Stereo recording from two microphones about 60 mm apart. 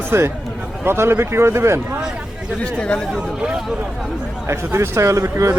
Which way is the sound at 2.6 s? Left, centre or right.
Centre.